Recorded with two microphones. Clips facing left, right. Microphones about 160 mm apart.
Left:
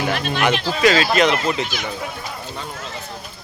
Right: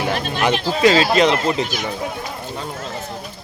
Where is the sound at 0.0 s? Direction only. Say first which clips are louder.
Even; 35° right (ahead or behind).